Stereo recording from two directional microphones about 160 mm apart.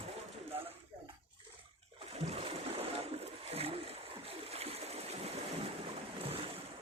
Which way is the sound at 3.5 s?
35° right (ahead or behind).